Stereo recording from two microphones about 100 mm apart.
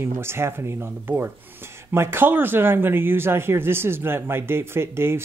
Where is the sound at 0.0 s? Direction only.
25° right (ahead or behind).